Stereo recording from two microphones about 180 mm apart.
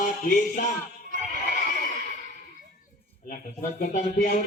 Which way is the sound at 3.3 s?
50° left (ahead or behind).